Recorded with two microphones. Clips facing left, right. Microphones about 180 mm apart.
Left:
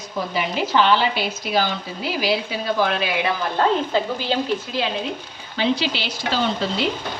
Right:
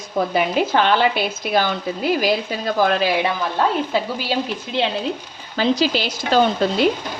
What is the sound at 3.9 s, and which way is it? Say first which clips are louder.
Speech: even; 10° right (ahead or behind).